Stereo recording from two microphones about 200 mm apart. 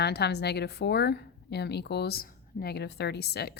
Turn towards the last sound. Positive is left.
turn(degrees=55)  # may be behind; listen again after turning